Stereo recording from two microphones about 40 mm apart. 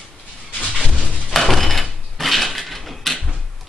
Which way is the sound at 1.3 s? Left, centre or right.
Centre.